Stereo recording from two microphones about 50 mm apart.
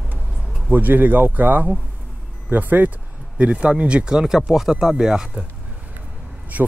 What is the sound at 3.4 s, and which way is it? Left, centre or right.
Speech, right.